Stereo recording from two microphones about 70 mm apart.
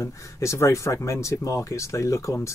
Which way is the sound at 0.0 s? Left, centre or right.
Left.